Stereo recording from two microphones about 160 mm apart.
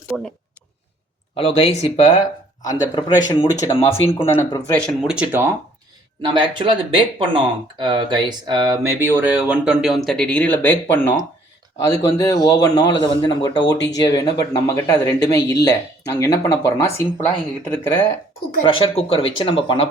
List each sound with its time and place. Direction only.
0.1 s speech: 5° right (ahead or behind)
1.4 s speech: 40° left (ahead or behind)
4.9 s speech: 5° right (ahead or behind)
6.2 s speech: 30° right (ahead or behind); by 18.0 s 20° left (ahead or behind)
18.6 s speech: 35° left (ahead or behind)